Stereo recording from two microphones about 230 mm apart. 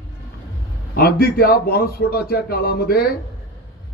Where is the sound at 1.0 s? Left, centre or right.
Left.